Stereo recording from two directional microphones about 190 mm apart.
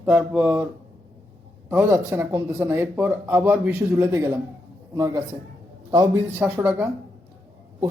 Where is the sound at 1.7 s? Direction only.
15° right (ahead or behind).